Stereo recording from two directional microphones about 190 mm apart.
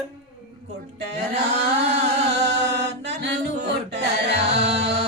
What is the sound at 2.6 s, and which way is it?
Music, 65° right (ahead or behind).